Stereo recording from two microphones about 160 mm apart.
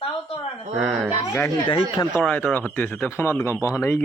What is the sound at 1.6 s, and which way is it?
Speech, 30° left (ahead or behind).